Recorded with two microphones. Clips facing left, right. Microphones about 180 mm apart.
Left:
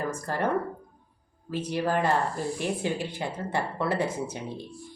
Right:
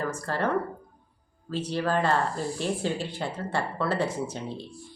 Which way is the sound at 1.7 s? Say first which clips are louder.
Even; 15° left (ahead or behind).